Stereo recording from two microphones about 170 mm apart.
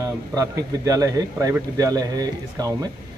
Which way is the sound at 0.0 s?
20° right (ahead or behind).